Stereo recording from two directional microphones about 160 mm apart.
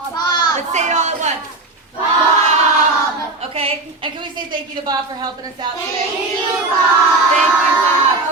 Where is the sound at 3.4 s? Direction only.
35° right (ahead or behind).